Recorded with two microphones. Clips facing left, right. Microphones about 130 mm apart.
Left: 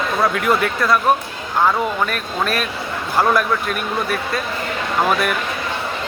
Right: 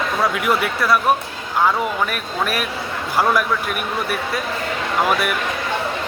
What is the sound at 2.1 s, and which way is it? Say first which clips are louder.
Speech: left 1 dB; 10° right (ahead or behind).